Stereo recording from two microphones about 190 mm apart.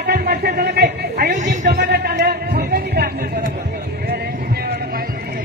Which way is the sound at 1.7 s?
55° right (ahead or behind).